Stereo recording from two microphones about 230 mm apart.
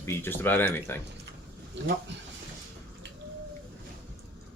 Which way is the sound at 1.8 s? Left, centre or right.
Right.